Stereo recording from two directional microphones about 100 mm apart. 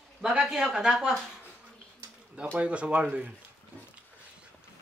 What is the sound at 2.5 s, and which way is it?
Speech, 10° right (ahead or behind).